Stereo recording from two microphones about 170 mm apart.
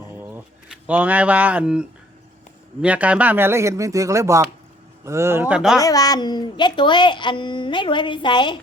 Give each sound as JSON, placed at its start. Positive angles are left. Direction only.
{"t": 0.2, "sound": "a sound", "side_deg": -10}
{"t": 2.8, "sound": "speech", "side_deg": -10}
{"t": 5.8, "sound": "speech", "side_deg": 20}